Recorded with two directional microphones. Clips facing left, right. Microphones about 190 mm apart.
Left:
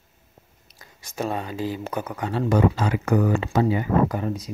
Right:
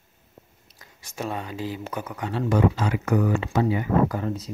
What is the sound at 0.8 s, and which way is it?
Speech, 35° left (ahead or behind).